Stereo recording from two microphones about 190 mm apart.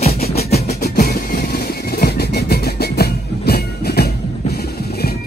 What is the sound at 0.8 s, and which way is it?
Music, 50° left (ahead or behind).